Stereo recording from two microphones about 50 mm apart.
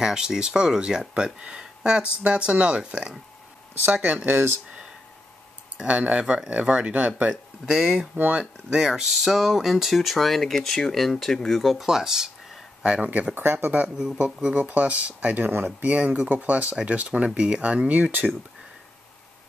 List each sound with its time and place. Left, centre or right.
0.0 s speech: centre
3.8 s speech: right
4.3 s speech: right
5.9 s speech: right
7.7 s speech: centre
8.2 s speech: right
8.7 s speech: centre
13.3 s speech: right
14.1 s speech: right